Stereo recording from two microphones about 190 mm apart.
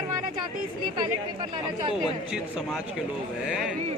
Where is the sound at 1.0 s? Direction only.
25° right (ahead or behind).